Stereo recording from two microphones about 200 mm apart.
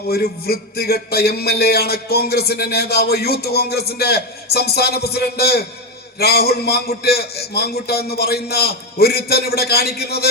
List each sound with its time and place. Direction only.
0.1 s a man's voice: 50° left (ahead or behind)